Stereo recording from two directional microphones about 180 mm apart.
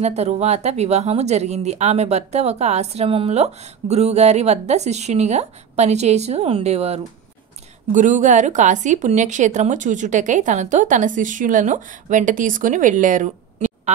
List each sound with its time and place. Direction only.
0.0 s a woman's voice: 35° right (ahead or behind)